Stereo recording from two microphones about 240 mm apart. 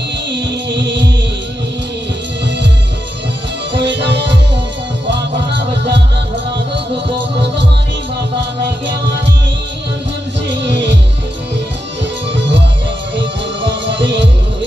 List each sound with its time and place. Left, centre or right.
0.3 s music: right
3.7 s music: right
5.5 s music: right
10.5 s music: right
12.0 s music: right
13.7 s music: right